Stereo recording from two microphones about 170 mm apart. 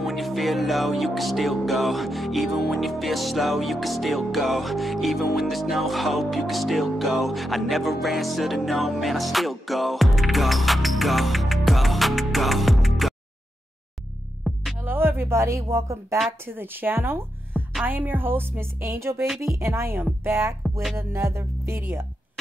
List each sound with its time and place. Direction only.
0.0 s music: centre (ahead or behind)
14.4 s music: centre (ahead or behind)
14.9 s speech: 15° right (ahead or behind)
19.2 s music: centre (ahead or behind)
19.6 s speech: 15° right (ahead or behind)